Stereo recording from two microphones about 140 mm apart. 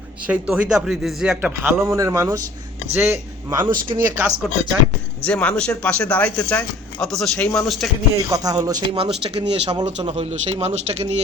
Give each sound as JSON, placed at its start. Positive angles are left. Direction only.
{"t": 0.3, "sound": "a man's voice", "side_deg": -5}
{"t": 1.9, "sound": "speech", "side_deg": -20}
{"t": 3.6, "sound": "speech", "side_deg": -30}
{"t": 3.9, "sound": "speech", "side_deg": -15}
{"t": 5.2, "sound": "a man's voice", "side_deg": 10}
{"t": 8.3, "sound": "speech", "side_deg": -25}
{"t": 9.0, "sound": "speech", "side_deg": -40}
{"t": 9.8, "sound": "a man's voice", "side_deg": -50}